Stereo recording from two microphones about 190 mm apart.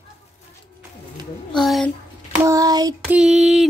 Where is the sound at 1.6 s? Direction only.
Centre (ahead or behind).